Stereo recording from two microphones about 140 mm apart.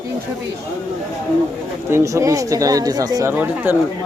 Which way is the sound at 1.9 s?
20° right (ahead or behind).